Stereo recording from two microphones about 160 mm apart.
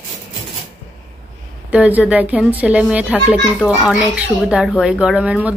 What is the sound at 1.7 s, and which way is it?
Speech, 10° right (ahead or behind).